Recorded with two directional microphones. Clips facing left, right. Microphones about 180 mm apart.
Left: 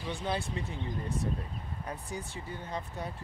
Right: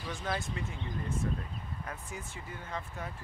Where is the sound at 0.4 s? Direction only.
35° left (ahead or behind).